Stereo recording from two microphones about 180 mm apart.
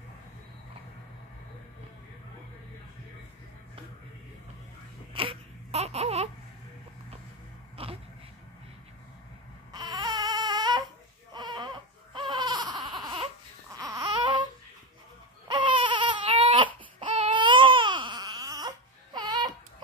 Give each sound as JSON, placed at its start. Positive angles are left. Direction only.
{"t": 5.1, "sound": "baby cry", "side_deg": -30}
{"t": 7.7, "sound": "a sound", "side_deg": -30}
{"t": 9.7, "sound": "baby cry", "side_deg": -25}